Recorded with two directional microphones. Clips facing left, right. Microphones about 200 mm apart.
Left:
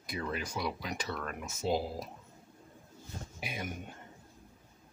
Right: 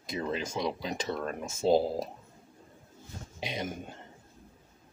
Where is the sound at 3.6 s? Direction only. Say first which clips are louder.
Right 3 dB; 30° right (ahead or behind).